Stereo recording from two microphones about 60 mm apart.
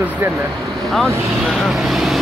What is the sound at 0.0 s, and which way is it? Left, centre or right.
Speech, right.